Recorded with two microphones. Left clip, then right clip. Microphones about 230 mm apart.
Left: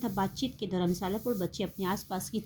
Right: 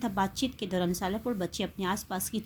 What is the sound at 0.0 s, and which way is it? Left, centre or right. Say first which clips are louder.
Speech: right 3 dB; centre.